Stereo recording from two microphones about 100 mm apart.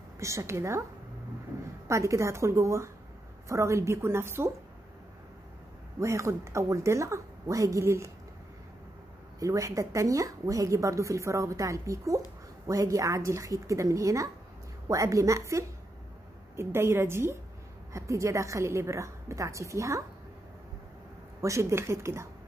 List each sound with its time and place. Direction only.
0.2 s a woman's voice: 30° right (ahead or behind)
1.9 s a woman's voice: 30° right (ahead or behind)
5.9 s a woman's voice: 30° right (ahead or behind)
9.4 s a woman's voice: 35° right (ahead or behind)
21.4 s a woman's voice: 30° right (ahead or behind)